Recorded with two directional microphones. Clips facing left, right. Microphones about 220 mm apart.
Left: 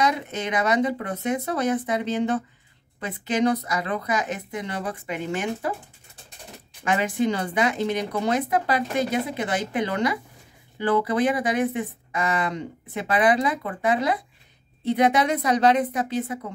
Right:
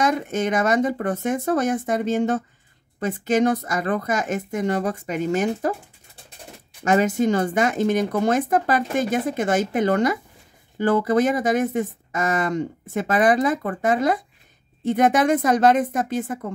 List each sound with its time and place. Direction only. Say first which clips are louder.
0.0 s speech: right 4 dB; 45° right (ahead or behind)
6.8 s speech: right 4 dB; 45° right (ahead or behind)